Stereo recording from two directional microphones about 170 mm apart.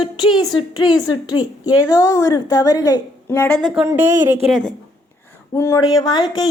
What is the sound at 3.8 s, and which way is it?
Speech, 15° right (ahead or behind).